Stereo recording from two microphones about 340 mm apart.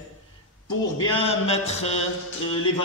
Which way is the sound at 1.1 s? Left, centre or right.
Centre.